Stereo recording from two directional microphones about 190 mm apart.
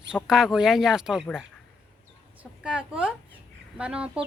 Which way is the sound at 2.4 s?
5° right (ahead or behind).